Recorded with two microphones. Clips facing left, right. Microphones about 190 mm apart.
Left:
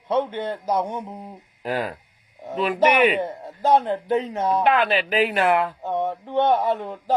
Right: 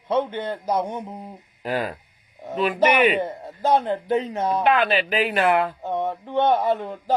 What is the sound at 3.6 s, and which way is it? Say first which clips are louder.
Speech: left 1 dB; 40° right (ahead or behind).